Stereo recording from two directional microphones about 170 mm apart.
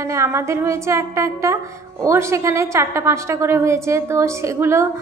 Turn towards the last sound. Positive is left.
turn(degrees=-15)  # may be behind; listen again after turning